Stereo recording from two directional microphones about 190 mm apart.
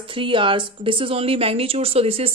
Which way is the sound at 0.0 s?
25° right (ahead or behind).